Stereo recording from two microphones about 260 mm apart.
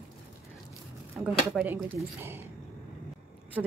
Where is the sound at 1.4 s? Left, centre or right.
Centre.